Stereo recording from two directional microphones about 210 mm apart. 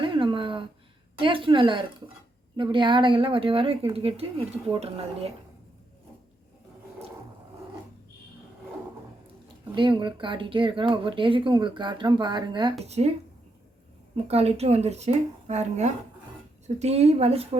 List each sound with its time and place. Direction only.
0.0 s a sound: 25° right (ahead or behind)
1.2 s a woman's voice: 25° right (ahead or behind)
10.0 s a woman's voice: 25° right (ahead or behind)
14.3 s a woman's voice: 30° right (ahead or behind)